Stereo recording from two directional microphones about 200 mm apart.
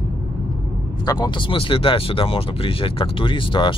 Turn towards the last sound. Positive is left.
turn(degrees=25)  # may be behind; listen again after turning